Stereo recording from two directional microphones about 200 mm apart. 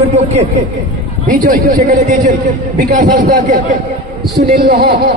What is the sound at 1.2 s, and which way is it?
A man's voice, 40° right (ahead or behind).